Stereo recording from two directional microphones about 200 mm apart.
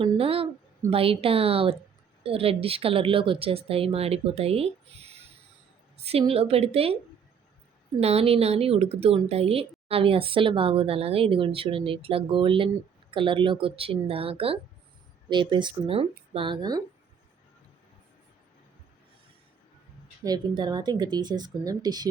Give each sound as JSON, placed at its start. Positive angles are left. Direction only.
{"t": 0.0, "sound": "a woman's voice", "side_deg": -30}
{"t": 7.9, "sound": "a woman's voice", "side_deg": -30}
{"t": 20.6, "sound": "a woman's voice", "side_deg": -20}